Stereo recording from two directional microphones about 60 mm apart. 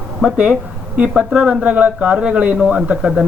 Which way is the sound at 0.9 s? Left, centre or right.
Right.